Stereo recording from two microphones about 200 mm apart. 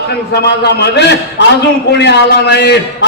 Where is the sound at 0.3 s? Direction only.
55° left (ahead or behind).